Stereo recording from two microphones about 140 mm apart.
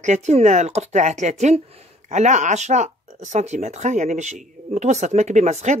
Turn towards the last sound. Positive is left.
turn(degrees=-50)  # may be behind; listen again after turning